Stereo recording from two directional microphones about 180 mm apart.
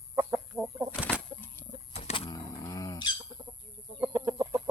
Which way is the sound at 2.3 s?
20° left (ahead or behind).